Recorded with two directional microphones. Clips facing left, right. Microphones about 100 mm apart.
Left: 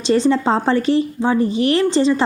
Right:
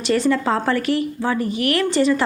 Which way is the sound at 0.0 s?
25° left (ahead or behind).